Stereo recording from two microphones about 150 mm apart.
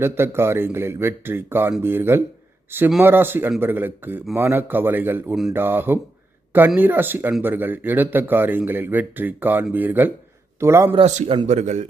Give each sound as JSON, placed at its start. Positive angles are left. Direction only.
{"t": 0.0, "sound": "speech", "side_deg": -15}
{"t": 10.9, "sound": "speech", "side_deg": -40}